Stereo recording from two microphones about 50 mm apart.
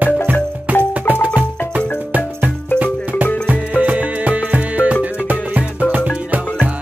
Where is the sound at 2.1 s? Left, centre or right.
Right.